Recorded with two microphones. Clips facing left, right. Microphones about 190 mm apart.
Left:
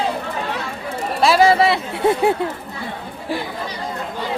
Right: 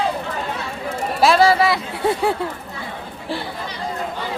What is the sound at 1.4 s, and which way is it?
Speech, 25° left (ahead or behind).